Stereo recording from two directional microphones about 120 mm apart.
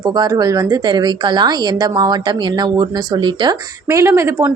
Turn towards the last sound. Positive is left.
turn(degrees=-20)  # may be behind; listen again after turning